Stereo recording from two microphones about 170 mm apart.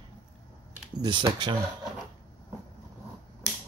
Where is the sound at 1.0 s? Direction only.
25° right (ahead or behind).